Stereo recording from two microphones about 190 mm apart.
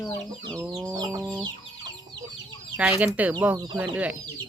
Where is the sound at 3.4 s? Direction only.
10° right (ahead or behind).